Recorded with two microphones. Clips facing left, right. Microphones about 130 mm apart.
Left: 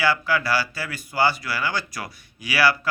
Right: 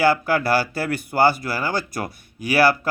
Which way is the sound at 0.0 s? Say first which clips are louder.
Right 4 dB; 50° right (ahead or behind).